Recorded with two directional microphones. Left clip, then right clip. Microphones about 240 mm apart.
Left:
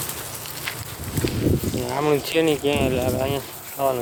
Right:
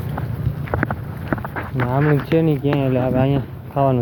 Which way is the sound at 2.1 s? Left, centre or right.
Centre.